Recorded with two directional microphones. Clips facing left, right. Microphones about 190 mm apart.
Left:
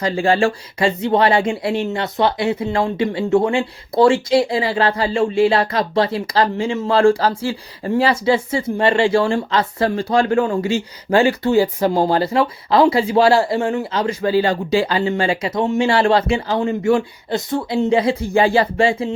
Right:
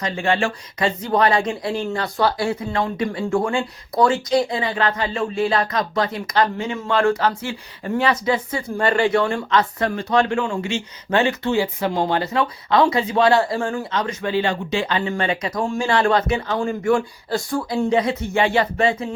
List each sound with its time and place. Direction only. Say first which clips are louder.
0.0 s speech: left 5 dB; 35° left (ahead or behind)